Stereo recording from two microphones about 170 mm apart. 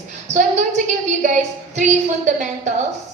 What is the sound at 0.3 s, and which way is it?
A woman's voice, 45° right (ahead or behind).